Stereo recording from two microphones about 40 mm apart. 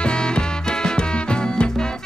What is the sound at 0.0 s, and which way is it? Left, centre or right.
Music, left.